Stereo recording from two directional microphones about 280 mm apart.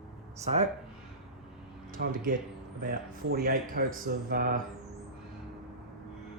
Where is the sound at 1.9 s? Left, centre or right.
Right.